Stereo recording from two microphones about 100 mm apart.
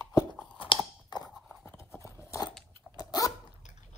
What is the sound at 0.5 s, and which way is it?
Chewing, 55° left (ahead or behind).